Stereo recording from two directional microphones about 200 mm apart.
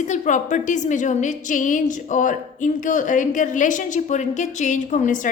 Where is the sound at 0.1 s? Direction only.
40° left (ahead or behind).